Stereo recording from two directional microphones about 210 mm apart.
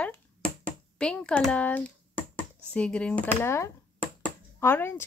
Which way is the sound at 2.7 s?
5° left (ahead or behind).